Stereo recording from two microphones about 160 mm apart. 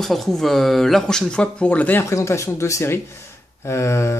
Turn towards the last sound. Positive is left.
turn(degrees=15)  # may be behind; listen again after turning